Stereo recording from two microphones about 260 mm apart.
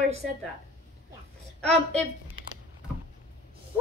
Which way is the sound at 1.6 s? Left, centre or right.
Right.